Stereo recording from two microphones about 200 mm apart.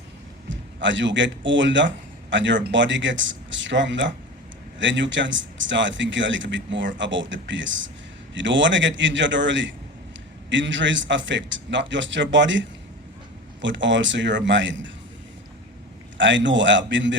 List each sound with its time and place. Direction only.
0.4 s a man's voice: 65° right (ahead or behind)
16.1 s speech: 65° right (ahead or behind)